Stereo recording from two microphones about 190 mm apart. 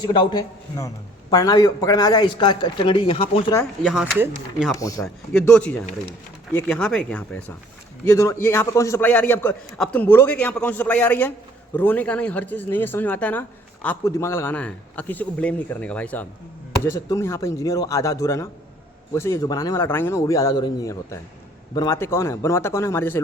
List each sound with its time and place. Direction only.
0.0 s speech: 20° left (ahead or behind)
3.8 s speech: 5° right (ahead or behind)
4.7 s a man's voice: 15° left (ahead or behind)
5.0 s a man's voice: 5° left (ahead or behind)